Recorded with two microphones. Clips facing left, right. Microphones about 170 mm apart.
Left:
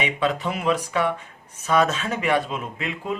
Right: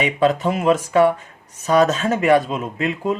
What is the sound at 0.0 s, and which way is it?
Speech, 40° right (ahead or behind).